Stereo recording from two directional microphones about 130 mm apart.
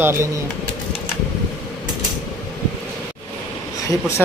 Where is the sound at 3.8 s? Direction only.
25° left (ahead or behind).